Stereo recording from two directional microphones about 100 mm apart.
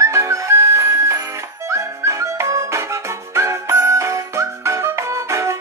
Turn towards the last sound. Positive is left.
turn(degrees=-30)  # may be behind; listen again after turning